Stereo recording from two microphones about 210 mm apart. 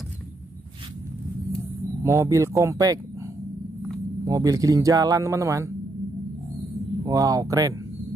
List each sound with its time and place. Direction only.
2.0 s speech: 15° right (ahead or behind)
4.2 s speech: 15° right (ahead or behind)
7.1 s speech: 15° right (ahead or behind)